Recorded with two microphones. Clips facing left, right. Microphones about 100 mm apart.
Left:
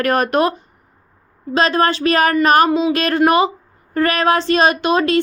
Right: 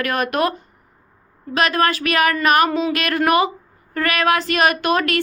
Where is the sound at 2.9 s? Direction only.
30° left (ahead or behind).